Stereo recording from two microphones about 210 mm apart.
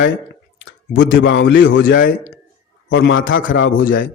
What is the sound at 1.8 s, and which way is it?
Speech, 45° left (ahead or behind).